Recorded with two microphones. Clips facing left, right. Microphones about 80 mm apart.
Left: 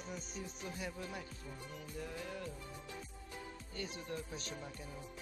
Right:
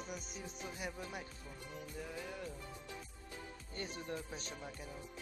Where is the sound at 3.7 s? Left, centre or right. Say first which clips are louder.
Right 1 dB; right.